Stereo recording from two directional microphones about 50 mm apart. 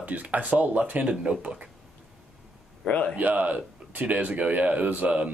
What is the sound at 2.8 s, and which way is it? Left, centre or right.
Speech, left.